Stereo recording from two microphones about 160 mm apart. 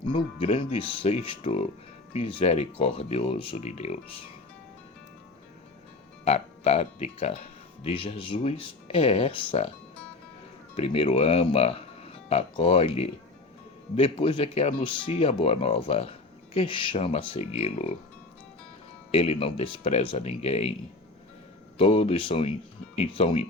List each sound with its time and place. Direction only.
0.0 s speech: 30° left (ahead or behind)
6.2 s speech: 40° left (ahead or behind)
10.8 s speech: 35° left (ahead or behind)
19.1 s speech: 40° left (ahead or behind)
21.8 s speech: 35° left (ahead or behind)